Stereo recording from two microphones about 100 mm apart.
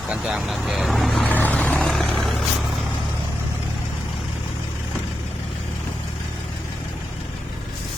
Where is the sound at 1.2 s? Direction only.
15° left (ahead or behind).